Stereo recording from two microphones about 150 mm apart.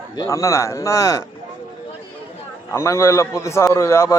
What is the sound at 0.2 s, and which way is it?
A man's voice, 20° left (ahead or behind).